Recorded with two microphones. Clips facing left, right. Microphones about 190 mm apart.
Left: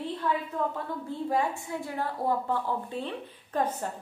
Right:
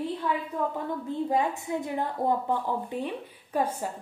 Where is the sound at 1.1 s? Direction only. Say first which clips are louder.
Right 2 dB; 20° right (ahead or behind).